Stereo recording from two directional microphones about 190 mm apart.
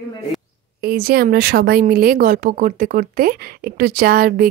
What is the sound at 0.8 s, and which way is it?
Speech, 55° right (ahead or behind).